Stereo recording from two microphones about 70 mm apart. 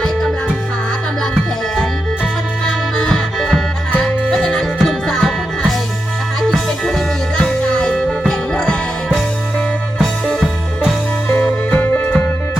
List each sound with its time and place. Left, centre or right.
2.6 s music: centre
4.0 s music: centre
4.4 s music: centre
11.3 s music: left